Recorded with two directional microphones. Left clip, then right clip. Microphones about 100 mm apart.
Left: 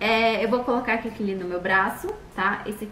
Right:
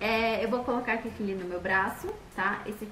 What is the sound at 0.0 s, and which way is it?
A woman's voice, centre (ahead or behind).